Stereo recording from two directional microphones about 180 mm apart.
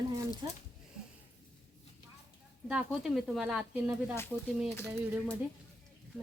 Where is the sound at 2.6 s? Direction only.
5° right (ahead or behind).